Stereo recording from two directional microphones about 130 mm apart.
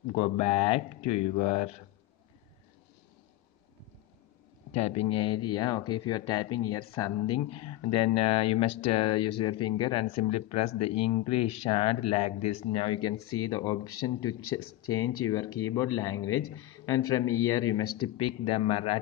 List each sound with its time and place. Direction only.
0.1 s speech: 45° left (ahead or behind)
4.7 s speech: 50° left (ahead or behind)
13.5 s speech: 25° left (ahead or behind)
18.1 s speech: 40° left (ahead or behind)